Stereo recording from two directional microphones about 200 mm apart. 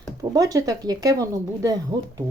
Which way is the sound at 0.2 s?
15° right (ahead or behind).